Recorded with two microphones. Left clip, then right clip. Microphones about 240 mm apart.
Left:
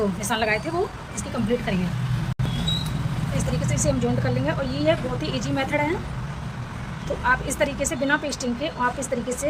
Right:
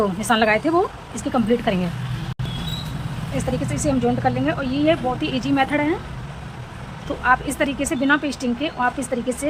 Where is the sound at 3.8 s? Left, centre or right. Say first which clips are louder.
Right 5 dB; centre.